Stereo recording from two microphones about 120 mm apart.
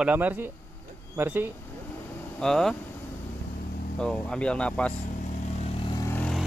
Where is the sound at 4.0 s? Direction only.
5° left (ahead or behind).